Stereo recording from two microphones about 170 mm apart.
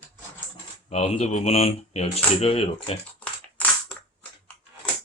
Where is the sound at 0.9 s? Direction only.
40° left (ahead or behind).